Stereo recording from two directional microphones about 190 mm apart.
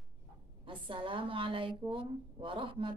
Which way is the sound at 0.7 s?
25° right (ahead or behind).